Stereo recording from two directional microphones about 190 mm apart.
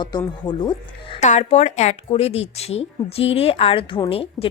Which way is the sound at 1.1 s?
35° left (ahead or behind).